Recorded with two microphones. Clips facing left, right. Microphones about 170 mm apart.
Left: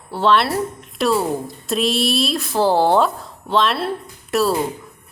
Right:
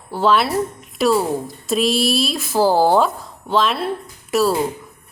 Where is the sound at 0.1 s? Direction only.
Centre (ahead or behind).